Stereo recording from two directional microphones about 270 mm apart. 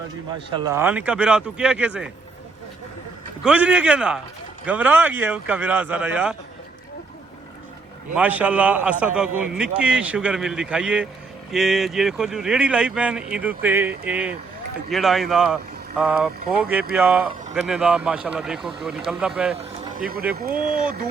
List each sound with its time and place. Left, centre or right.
0.3 s speech: centre
3.4 s speech: centre
8.1 s speech: centre
19.5 s vehicle: right
20.3 s speech: right